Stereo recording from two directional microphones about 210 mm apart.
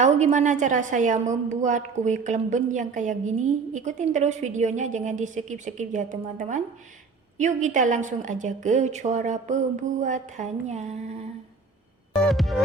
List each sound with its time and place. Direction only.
0.0 s a woman's voice: 35° right (ahead or behind)
12.1 s music: centre (ahead or behind)